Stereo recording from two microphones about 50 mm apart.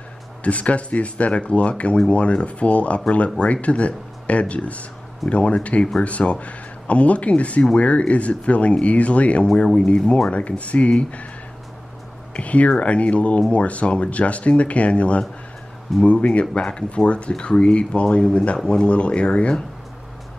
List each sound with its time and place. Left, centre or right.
0.4 s speech: left
12.4 s speech: left